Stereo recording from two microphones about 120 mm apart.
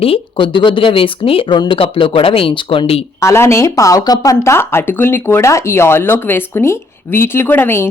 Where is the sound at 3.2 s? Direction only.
20° left (ahead or behind).